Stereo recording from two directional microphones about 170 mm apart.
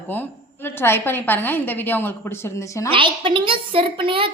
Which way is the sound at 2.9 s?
30° right (ahead or behind).